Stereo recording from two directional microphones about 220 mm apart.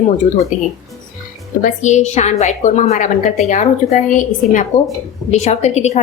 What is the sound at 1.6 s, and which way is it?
Speech, 30° left (ahead or behind).